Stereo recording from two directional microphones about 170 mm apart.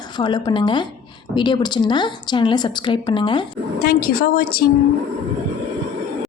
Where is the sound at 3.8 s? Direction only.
60° left (ahead or behind).